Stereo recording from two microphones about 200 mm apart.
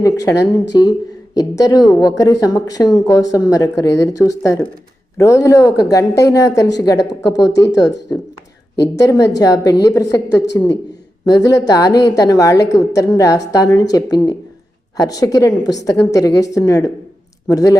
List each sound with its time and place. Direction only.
0.2 s a woman's voice: 15° left (ahead or behind)